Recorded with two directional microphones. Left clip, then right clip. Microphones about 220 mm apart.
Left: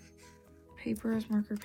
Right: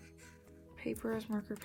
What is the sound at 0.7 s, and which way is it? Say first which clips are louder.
Speech: left 3 dB; 35° left (ahead or behind).